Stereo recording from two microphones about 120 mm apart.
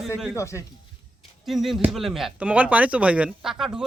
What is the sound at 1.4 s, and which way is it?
A man's voice, centre (ahead or behind).